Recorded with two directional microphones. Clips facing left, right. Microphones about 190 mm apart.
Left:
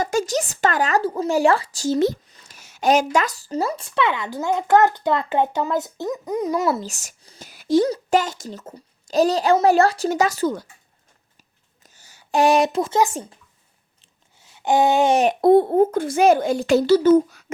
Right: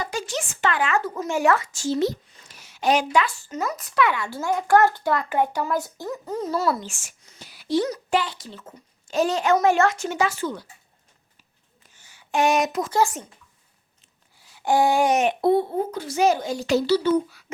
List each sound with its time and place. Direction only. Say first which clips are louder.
0.0 s speech: left 7 dB; 45° left (ahead or behind); by 6.8 s 20° left (ahead or behind)
6.8 s speech: left 4 dB; 40° left (ahead or behind)
11.8 s a sound: left 2 dB; 40° left (ahead or behind)
14.0 s speech: left 2 dB; 20° left (ahead or behind); by 17.4 s 45° left (ahead or behind)